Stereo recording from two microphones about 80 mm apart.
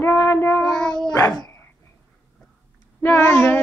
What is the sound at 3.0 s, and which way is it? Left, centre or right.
Music, left.